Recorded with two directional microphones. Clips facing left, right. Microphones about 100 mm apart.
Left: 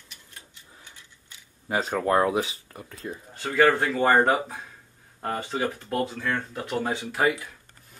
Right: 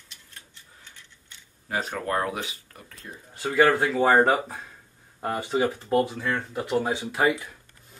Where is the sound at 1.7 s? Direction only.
30° left (ahead or behind).